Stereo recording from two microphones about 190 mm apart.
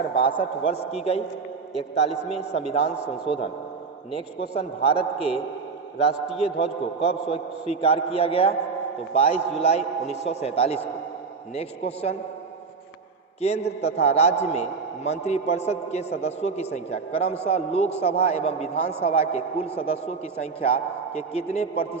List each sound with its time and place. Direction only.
0.1 s a man's voice: 25° left (ahead or behind)
2.3 s a man's voice: 35° left (ahead or behind)
13.7 s a man's voice: 35° left (ahead or behind)